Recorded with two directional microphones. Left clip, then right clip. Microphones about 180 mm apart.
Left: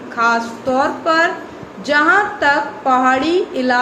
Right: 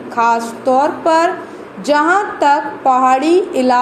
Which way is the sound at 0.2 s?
40° right (ahead or behind).